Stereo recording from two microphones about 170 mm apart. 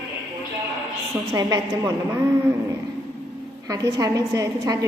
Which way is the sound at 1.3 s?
20° right (ahead or behind).